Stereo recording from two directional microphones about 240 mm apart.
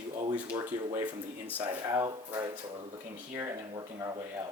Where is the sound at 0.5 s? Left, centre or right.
Centre.